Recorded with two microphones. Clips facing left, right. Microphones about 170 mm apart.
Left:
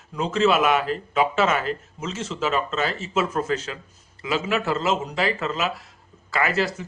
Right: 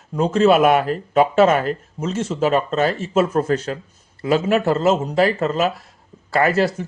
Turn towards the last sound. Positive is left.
turn(degrees=-50)  # may be behind; listen again after turning